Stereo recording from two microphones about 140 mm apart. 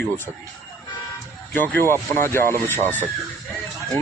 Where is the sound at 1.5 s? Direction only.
10° left (ahead or behind).